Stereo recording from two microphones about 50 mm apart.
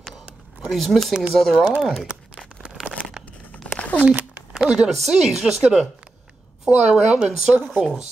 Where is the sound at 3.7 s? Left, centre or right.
Left.